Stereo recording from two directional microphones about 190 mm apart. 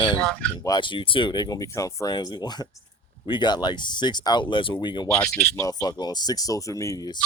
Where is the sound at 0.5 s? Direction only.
25° left (ahead or behind).